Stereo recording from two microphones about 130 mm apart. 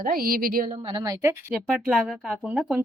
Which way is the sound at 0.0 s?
90° right.